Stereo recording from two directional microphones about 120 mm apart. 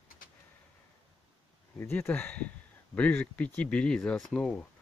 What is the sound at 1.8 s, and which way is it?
Speech, 15° left (ahead or behind).